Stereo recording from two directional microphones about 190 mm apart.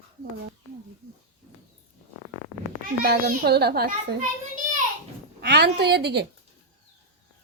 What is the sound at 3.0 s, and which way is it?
Speech, 55° right (ahead or behind).